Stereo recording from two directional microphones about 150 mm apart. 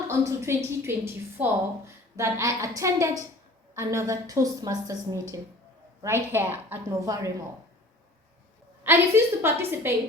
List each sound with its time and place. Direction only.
0.1 s a woman's voice: 20° right (ahead or behind)
8.8 s a woman's voice: 15° right (ahead or behind)